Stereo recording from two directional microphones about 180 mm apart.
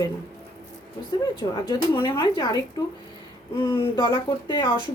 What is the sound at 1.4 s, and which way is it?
Speech, 25° left (ahead or behind).